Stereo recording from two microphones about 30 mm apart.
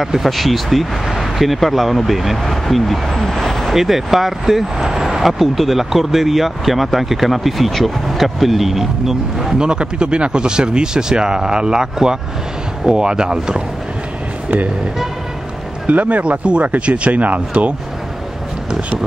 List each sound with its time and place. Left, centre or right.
0.0 s speech: centre
3.2 s vehicle: centre
3.7 s speech: centre
9.6 s speech: right
15.9 s speech: right